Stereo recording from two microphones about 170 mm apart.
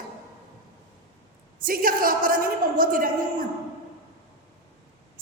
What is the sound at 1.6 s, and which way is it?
A woman's voice, 55° right (ahead or behind).